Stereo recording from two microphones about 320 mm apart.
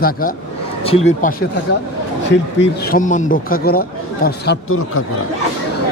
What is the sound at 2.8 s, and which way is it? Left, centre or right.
Speech, left.